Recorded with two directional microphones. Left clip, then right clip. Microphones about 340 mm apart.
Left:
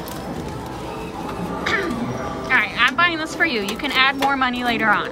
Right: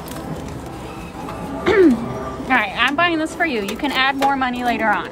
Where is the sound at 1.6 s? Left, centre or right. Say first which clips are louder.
Right 9 dB; centre.